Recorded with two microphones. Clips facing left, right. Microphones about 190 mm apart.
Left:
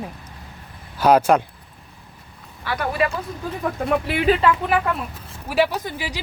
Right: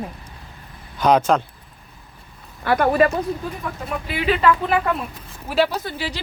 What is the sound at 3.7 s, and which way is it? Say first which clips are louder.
Speech: left 5 dB; 60° left (ahead or behind).